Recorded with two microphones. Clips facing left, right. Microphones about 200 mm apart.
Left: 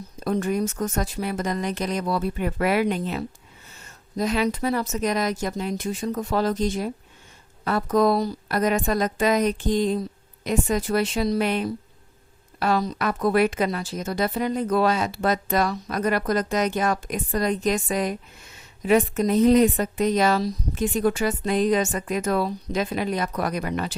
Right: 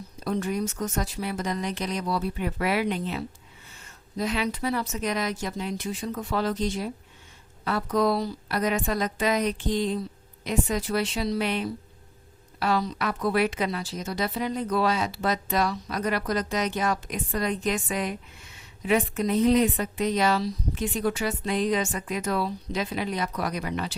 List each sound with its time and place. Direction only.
0.2 s a woman's voice: 50° left (ahead or behind)